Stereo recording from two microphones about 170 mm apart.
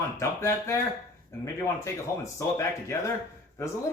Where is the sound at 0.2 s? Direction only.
15° left (ahead or behind).